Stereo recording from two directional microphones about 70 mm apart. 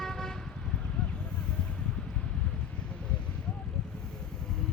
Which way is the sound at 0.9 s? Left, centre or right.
Centre.